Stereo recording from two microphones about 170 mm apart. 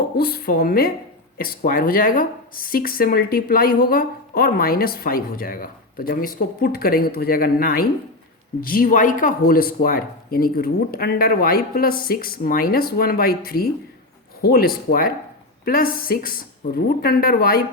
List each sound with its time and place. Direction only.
0.2 s speech: 65° left (ahead or behind)